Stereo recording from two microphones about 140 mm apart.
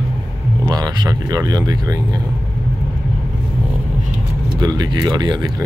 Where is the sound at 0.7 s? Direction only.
25° right (ahead or behind).